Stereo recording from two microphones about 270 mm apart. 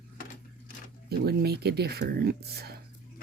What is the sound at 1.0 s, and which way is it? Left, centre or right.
Speech, right.